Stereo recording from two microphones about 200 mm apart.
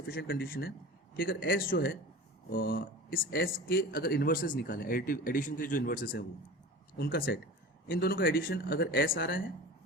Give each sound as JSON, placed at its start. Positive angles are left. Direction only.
{"t": 0.1, "sound": "speech", "side_deg": 50}